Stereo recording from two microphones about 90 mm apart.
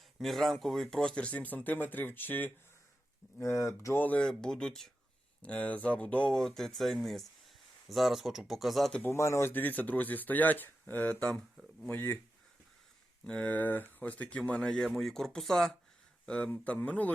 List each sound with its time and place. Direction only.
0.2 s speech: centre (ahead or behind); by 2.5 s 20° left (ahead or behind)
3.3 s speech: 35° left (ahead or behind)
3.9 s speech: 20° left (ahead or behind)
4.2 s speech: 10° left (ahead or behind)
9.0 s speech: 30° left (ahead or behind)
13.2 s speech: 15° left (ahead or behind)